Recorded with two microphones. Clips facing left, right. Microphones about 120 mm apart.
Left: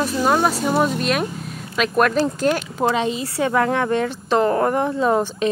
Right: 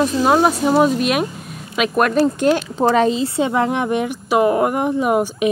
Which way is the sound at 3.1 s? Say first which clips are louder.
Right 3 dB; 25° right (ahead or behind).